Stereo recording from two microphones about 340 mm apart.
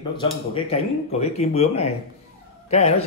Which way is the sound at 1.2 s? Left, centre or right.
Centre.